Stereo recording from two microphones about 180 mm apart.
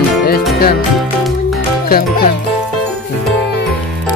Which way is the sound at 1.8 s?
55° left (ahead or behind).